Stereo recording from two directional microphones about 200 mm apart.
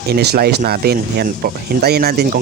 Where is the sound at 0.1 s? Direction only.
50° right (ahead or behind).